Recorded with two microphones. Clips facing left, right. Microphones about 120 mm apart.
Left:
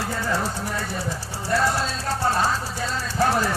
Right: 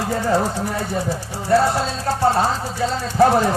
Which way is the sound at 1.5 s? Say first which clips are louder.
Right 6 dB; 30° right (ahead or behind).